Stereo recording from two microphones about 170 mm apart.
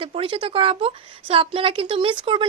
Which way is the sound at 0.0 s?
30° right (ahead or behind).